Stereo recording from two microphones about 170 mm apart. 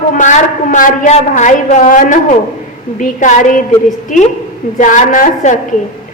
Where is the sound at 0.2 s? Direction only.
50° left (ahead or behind).